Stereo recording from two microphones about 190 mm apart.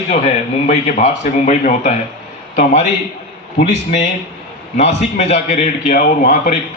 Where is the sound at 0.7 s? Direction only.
40° left (ahead or behind).